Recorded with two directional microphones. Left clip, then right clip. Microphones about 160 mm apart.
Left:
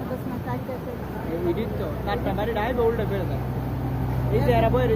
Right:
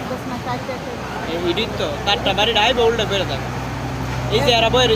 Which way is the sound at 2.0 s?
10° right (ahead or behind).